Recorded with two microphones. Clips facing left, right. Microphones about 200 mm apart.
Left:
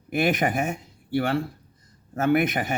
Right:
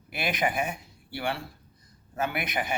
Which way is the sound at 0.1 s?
45° left (ahead or behind).